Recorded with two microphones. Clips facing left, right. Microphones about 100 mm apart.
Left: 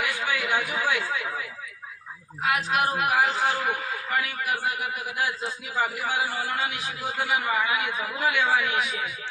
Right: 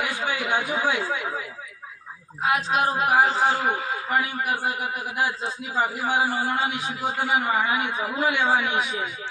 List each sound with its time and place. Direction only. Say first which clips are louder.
0.0 s speech: right 1 dB; 25° right (ahead or behind)
2.4 s a man's voice: right 2 dB; 25° right (ahead or behind)